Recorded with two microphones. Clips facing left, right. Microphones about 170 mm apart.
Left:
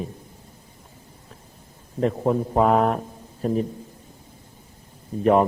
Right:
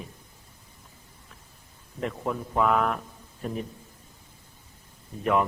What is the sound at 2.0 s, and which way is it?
A man's voice, 35° left (ahead or behind).